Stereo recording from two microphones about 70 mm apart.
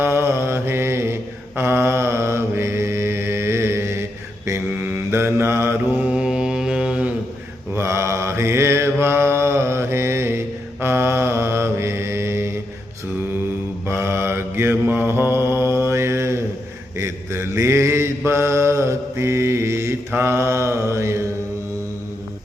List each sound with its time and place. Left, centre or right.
0.0 s mantra: right
6.1 s mantra: centre
7.7 s mantra: right
13.8 s mantra: right